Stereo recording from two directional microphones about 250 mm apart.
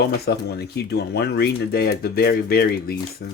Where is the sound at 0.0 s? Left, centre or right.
Left.